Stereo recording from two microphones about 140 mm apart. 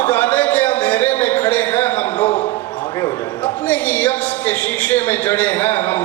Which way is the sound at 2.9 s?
25° left (ahead or behind).